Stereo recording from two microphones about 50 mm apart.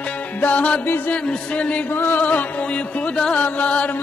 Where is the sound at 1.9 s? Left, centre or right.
Left.